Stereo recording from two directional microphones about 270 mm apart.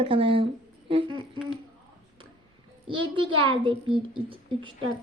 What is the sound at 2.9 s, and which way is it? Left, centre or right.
A woman's voice, centre.